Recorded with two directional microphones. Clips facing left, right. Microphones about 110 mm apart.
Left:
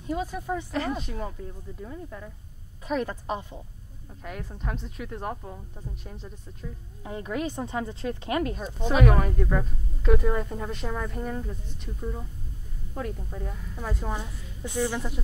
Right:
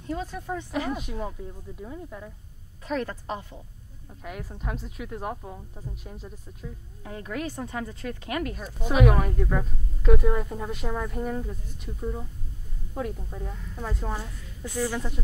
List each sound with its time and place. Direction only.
0.0 s a woman's voice: 10° left (ahead or behind)
0.7 s speech: 10° right (ahead or behind)
2.8 s a woman's voice: 15° left (ahead or behind)
4.2 s a woman's voice: 5° right (ahead or behind)
7.0 s speech: 20° left (ahead or behind)
8.8 s a woman's voice: 5° right (ahead or behind)
14.1 s a woman's voice: 20° left (ahead or behind)
15.0 s a woman's voice: 5° left (ahead or behind)